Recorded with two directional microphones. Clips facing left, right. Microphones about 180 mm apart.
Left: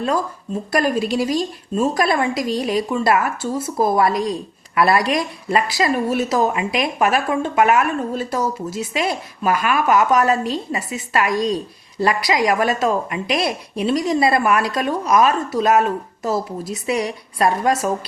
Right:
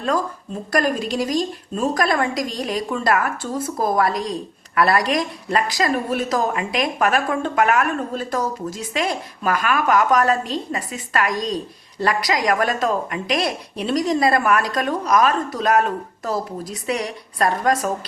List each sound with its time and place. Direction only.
0.7 s a woman's voice: 10° left (ahead or behind)